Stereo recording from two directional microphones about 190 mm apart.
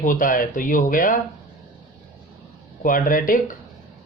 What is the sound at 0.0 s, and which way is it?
Speech, 45° left (ahead or behind).